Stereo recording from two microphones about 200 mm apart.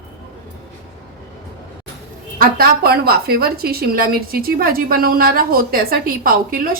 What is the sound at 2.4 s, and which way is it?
A woman's voice, 50° right (ahead or behind).